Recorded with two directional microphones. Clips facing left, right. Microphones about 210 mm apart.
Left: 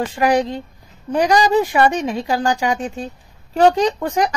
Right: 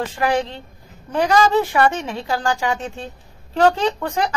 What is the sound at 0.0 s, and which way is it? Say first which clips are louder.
Speech: left 4 dB; 15° left (ahead or behind).